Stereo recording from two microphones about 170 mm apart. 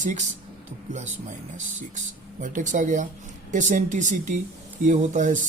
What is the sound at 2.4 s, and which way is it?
Speech, 50° right (ahead or behind).